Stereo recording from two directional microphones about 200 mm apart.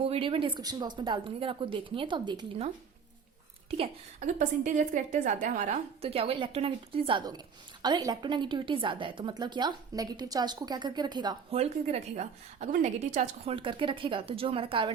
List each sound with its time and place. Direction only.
0.0 s a woman's voice: 30° right (ahead or behind)
3.7 s a woman's voice: 30° right (ahead or behind)